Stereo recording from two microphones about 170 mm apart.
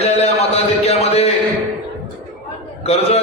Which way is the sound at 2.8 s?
35° left (ahead or behind).